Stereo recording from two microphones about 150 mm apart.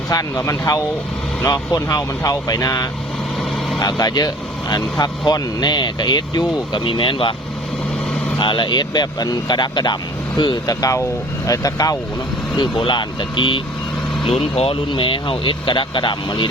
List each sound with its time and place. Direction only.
0.1 s speech: 20° left (ahead or behind)
8.4 s speech: 30° left (ahead or behind)